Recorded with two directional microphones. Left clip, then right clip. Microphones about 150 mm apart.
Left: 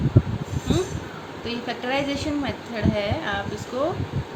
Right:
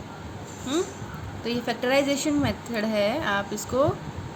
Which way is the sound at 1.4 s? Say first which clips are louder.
Right 2 dB; 50° right (ahead or behind).